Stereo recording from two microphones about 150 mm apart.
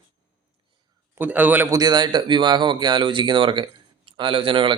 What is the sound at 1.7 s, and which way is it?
A man's voice, 25° right (ahead or behind).